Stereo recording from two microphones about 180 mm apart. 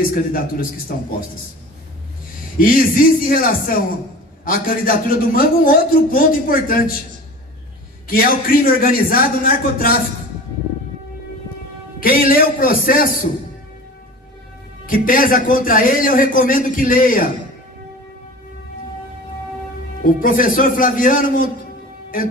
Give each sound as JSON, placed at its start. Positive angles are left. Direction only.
{"t": 0.1, "sound": "a man's voice", "side_deg": 50}
{"t": 2.6, "sound": "a man's voice", "side_deg": 50}
{"t": 8.1, "sound": "a man's voice", "side_deg": 55}
{"t": 12.0, "sound": "a man's voice", "side_deg": 50}
{"t": 14.9, "sound": "a man's voice", "side_deg": 50}
{"t": 20.1, "sound": "a man's voice", "side_deg": 50}